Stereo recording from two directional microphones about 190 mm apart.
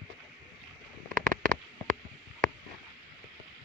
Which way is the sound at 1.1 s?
45° right (ahead or behind).